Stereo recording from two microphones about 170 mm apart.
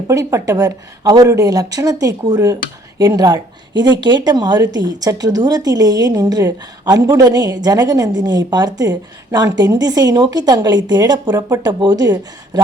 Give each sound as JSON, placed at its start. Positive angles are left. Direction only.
{"t": 0.1, "sound": "a woman's voice", "side_deg": -15}